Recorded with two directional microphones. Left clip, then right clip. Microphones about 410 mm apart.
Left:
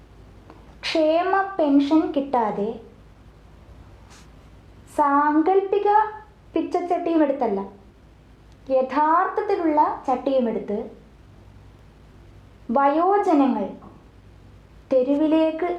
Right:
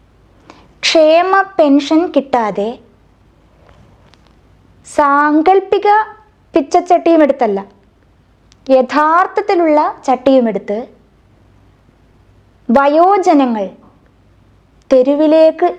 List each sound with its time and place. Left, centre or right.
0.4 s a woman's voice: right
4.9 s a woman's voice: right
8.6 s a woman's voice: right
12.7 s a woman's voice: right
14.8 s a woman's voice: right